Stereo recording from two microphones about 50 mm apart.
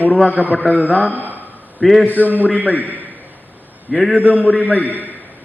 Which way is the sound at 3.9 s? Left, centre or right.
Centre.